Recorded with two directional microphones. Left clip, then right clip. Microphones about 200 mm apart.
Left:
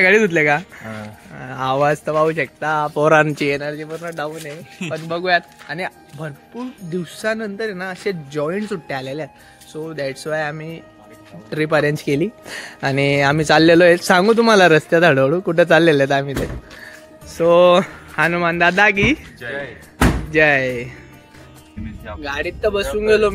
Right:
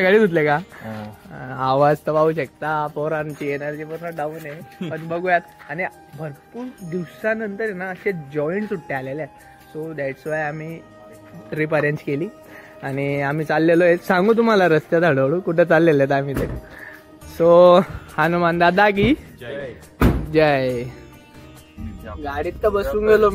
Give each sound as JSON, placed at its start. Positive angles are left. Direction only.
{"t": 0.0, "sound": "a sound", "side_deg": 0}
{"t": 1.7, "sound": "speech", "side_deg": -5}
{"t": 3.0, "sound": "speech", "side_deg": 70}
{"t": 3.6, "sound": "speech", "side_deg": 20}
{"t": 12.1, "sound": "speech", "side_deg": 45}
{"t": 20.3, "sound": "speech", "side_deg": -10}
{"t": 22.2, "sound": "speech", "side_deg": 20}